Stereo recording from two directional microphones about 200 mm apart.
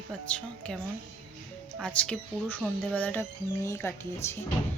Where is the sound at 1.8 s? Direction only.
5° left (ahead or behind).